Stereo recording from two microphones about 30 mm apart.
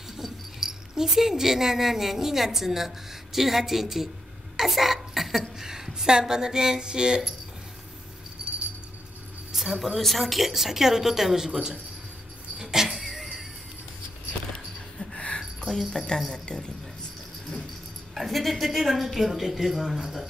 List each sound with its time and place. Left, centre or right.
0.6 s speech: centre
4.6 s burping: centre
5.6 s speech: centre
9.5 s a sound: centre
9.9 s speech: centre
10.5 s speech: centre
11.4 s speech: right
12.5 s vehicle: centre
13.0 s a sound: centre
15.1 s a sound: left
15.7 s speech: centre
18.1 s speech: centre